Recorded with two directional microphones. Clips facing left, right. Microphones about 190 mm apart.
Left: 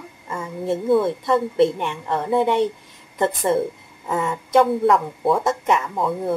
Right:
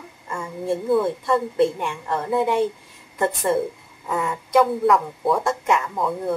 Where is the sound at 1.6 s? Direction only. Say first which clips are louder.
Left 2 dB; 20° left (ahead or behind).